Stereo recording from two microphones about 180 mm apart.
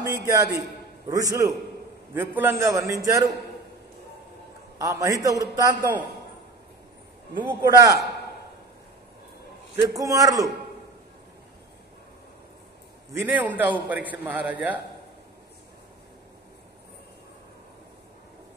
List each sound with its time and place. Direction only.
0.0 s a man's voice: 20° right (ahead or behind)
4.7 s a man's voice: 20° right (ahead or behind)
7.3 s a man's voice: 25° right (ahead or behind)
9.8 s a man's voice: 20° right (ahead or behind)
13.2 s a man's voice: 10° right (ahead or behind)